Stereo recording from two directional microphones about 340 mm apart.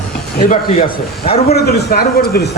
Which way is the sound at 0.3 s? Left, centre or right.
Left.